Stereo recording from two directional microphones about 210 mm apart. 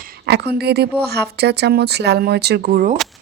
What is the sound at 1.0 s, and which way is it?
Speech, 50° right (ahead or behind).